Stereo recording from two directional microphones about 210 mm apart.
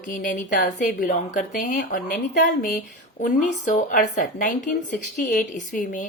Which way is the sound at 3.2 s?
35° left (ahead or behind).